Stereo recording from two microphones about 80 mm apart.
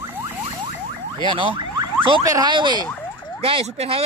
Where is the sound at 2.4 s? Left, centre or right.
Right.